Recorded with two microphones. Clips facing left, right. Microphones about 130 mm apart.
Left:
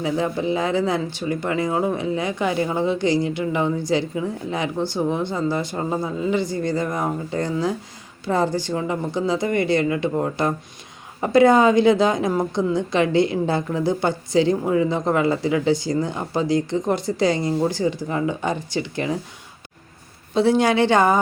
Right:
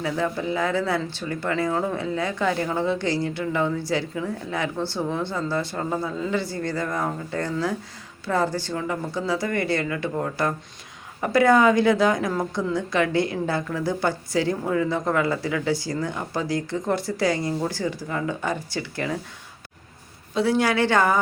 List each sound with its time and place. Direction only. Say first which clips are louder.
0.0 s a woman's voice: left 3 dB; 20° left (ahead or behind)
20.3 s a woman's voice: left 4 dB; 25° left (ahead or behind)